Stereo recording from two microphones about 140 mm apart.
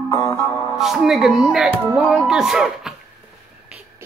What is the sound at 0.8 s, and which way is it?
Speech, 5° right (ahead or behind).